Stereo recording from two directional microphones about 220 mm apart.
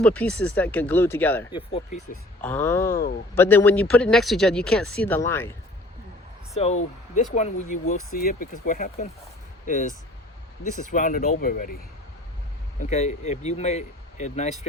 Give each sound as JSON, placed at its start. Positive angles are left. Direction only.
{"t": 0.0, "sound": "speech", "side_deg": 5}
{"t": 1.5, "sound": "speech", "side_deg": 20}
{"t": 2.4, "sound": "speech", "side_deg": 10}
{"t": 7.2, "sound": "speech", "side_deg": 30}
{"t": 12.8, "sound": "speech", "side_deg": 30}